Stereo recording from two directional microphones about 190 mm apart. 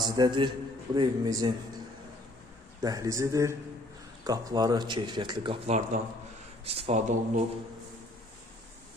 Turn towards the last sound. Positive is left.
turn(degrees=-35)  # may be behind; listen again after turning